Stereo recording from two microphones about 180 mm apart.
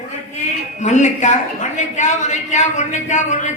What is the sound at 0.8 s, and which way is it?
A woman's voice, 40° left (ahead or behind).